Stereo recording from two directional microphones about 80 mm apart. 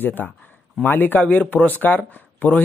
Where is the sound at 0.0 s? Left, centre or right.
Left.